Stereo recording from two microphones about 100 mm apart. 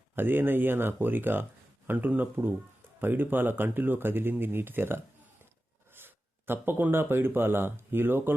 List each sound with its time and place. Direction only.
0.2 s speech: 20° right (ahead or behind)